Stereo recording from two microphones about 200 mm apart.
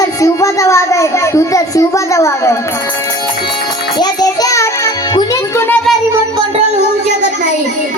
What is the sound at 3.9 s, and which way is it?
Music, 20° left (ahead or behind).